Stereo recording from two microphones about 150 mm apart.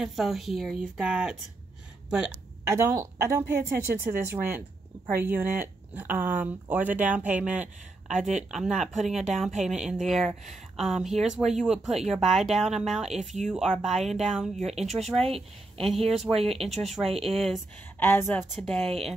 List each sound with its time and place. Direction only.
0.0 s speech: centre (ahead or behind)
2.7 s speech: 20° right (ahead or behind); by 17.6 s centre (ahead or behind)
17.9 s a woman's voice: 15° left (ahead or behind)
18.5 s speech: 5° left (ahead or behind)